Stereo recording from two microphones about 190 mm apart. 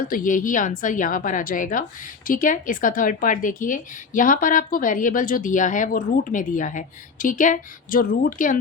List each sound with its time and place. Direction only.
0.1 s a woman's voice: 45° left (ahead or behind)